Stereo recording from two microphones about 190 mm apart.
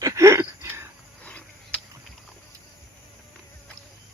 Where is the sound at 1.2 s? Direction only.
5° left (ahead or behind).